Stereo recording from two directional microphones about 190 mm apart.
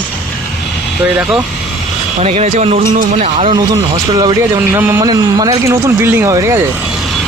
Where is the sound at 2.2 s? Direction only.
35° right (ahead or behind).